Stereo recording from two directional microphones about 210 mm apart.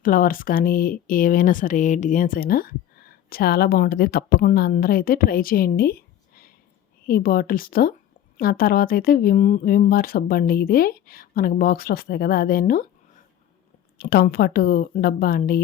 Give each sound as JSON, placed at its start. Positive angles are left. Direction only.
{"t": 0.0, "sound": "speech", "side_deg": 40}